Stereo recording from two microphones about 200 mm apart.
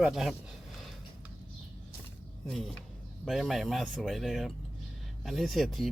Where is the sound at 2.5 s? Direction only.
Centre (ahead or behind).